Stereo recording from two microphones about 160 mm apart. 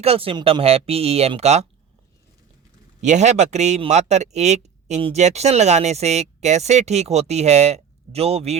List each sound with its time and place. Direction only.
0.0 s speech: 35° right (ahead or behind)
3.0 s speech: 45° right (ahead or behind)